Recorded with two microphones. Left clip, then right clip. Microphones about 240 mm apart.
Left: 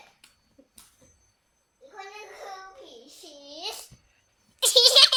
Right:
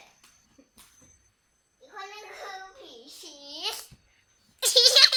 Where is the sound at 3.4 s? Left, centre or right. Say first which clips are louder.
Right 3 dB; centre.